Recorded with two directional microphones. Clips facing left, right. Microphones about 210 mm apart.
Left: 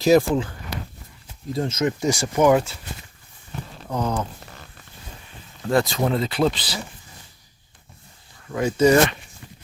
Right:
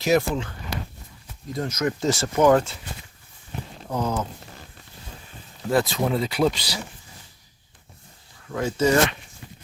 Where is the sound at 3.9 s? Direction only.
5° right (ahead or behind).